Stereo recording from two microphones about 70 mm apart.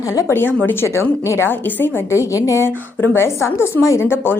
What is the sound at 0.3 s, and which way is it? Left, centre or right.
A woman's voice, left.